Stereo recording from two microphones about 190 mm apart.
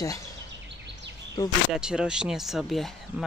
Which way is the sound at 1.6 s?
5° right (ahead or behind).